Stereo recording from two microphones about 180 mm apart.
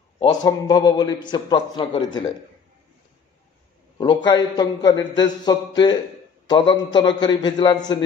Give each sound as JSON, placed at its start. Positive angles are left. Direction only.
{"t": 0.2, "sound": "a man's voice", "side_deg": 20}
{"t": 4.0, "sound": "a man's voice", "side_deg": 25}